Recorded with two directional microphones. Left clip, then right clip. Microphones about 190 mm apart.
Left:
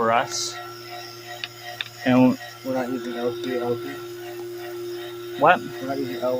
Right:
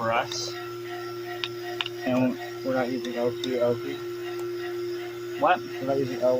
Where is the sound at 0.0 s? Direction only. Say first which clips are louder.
Left 5 dB; 45° left (ahead or behind).